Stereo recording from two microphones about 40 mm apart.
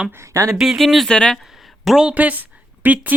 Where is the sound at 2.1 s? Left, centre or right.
Right.